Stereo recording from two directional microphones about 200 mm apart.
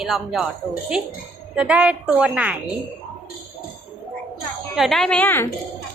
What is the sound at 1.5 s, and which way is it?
A woman's voice, 5° right (ahead or behind).